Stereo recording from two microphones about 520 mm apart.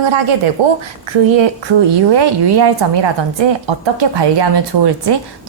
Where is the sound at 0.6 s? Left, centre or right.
Right.